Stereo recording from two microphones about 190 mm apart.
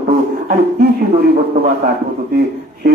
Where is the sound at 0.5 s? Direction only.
55° right (ahead or behind).